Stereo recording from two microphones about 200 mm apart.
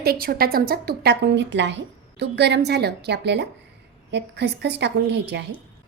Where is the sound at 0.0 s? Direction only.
50° right (ahead or behind).